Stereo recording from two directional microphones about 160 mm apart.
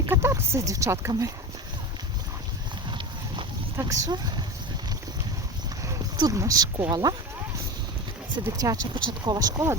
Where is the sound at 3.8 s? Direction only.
25° right (ahead or behind).